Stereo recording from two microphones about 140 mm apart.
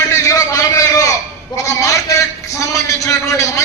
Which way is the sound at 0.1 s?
25° left (ahead or behind).